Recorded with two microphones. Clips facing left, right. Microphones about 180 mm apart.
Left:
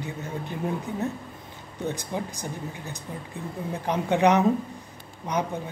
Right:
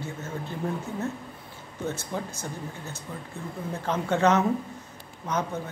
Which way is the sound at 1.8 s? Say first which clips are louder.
Left 2 dB; 15° left (ahead or behind).